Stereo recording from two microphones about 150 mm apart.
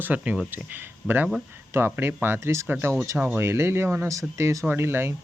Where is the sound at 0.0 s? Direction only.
10° right (ahead or behind).